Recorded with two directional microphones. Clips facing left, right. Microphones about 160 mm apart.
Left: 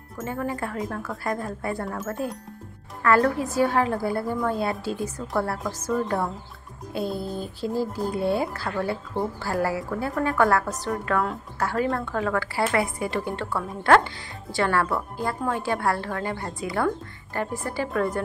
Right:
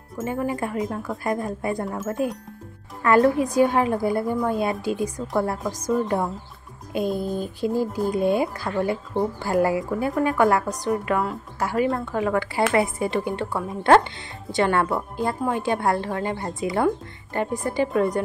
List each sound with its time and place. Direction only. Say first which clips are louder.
0.2 s a woman's voice: right 3 dB; 15° right (ahead or behind)